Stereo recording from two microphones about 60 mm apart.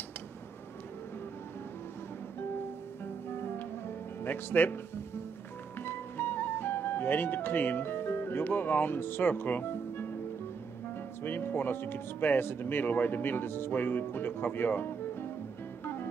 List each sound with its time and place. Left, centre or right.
3.3 s music: left
4.2 s speech: left
5.8 s music: left
11.2 s speech: left